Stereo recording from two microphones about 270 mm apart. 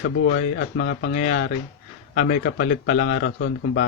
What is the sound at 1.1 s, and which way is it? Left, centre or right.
Speech, left.